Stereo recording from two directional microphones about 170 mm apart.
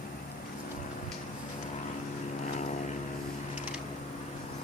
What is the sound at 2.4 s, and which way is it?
Vehicle, 45° left (ahead or behind).